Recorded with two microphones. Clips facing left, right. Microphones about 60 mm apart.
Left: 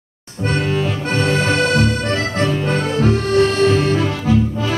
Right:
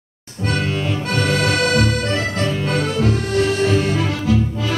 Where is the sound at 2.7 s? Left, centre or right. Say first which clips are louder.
Left 2 dB; left.